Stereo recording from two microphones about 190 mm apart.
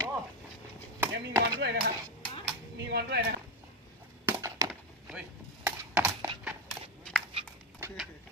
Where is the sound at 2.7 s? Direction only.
60° right (ahead or behind).